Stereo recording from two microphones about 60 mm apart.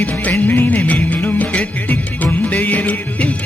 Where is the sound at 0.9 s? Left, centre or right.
Left.